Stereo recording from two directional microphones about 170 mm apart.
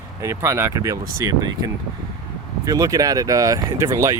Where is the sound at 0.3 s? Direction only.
15° right (ahead or behind).